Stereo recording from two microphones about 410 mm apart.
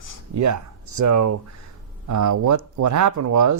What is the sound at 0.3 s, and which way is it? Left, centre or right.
Speech, right.